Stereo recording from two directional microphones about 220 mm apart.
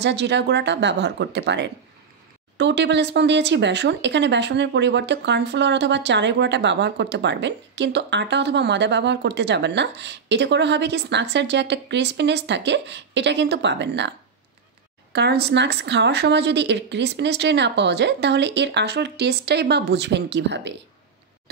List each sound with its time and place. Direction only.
0.0 s speech: 50° right (ahead or behind)
15.1 s speech: 50° right (ahead or behind)